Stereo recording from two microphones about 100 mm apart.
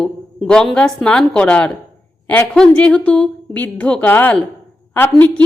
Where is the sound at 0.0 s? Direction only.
5° left (ahead or behind).